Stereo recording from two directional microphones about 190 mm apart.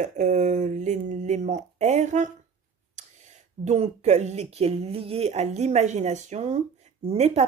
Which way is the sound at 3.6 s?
35° right (ahead or behind).